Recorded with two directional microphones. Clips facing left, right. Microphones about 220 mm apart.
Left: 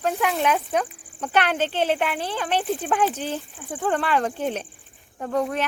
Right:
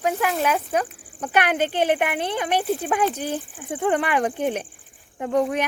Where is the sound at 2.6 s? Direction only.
5° right (ahead or behind).